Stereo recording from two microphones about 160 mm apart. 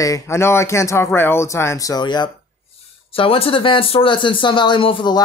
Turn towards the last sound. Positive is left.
turn(degrees=30)  # may be behind; listen again after turning